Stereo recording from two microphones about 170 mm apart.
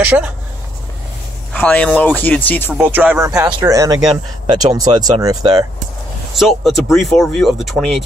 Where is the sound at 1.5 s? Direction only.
10° left (ahead or behind).